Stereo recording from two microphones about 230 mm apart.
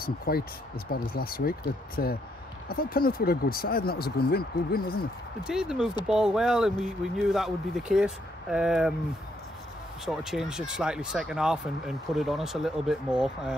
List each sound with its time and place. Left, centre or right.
0.0 s speech: left
5.4 s speech: centre
10.0 s speech: centre